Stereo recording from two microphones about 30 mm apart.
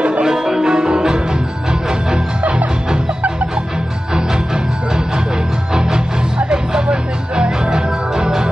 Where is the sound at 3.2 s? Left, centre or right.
Right.